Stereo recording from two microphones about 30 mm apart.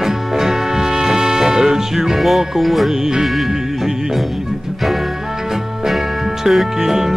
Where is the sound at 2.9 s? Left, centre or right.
Centre.